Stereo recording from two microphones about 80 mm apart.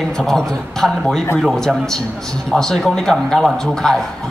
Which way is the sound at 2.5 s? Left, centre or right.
Centre.